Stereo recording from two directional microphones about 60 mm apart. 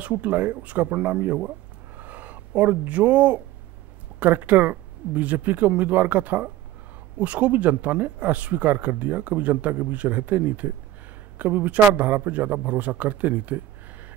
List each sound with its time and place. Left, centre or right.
0.0 s speech: right